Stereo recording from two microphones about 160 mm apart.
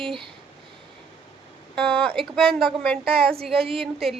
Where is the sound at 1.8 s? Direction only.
5° left (ahead or behind).